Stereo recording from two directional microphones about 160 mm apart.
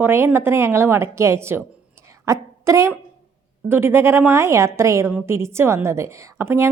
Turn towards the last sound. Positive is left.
turn(degrees=-15)  # may be behind; listen again after turning